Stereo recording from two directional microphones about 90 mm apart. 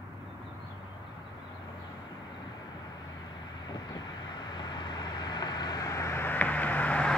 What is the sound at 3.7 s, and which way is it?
Vehicle, 50° left (ahead or behind).